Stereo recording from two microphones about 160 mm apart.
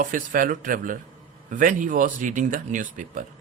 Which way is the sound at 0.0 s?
55° right (ahead or behind).